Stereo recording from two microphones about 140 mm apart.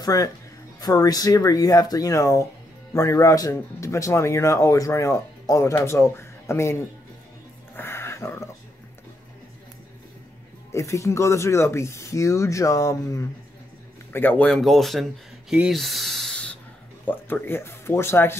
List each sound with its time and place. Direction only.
0.0 s a man's voice: 25° left (ahead or behind)
7.7 s a sound: 15° left (ahead or behind)
10.7 s a man's voice: 20° left (ahead or behind)
14.5 s speech: centre (ahead or behind); by 18.4 s 15° left (ahead or behind)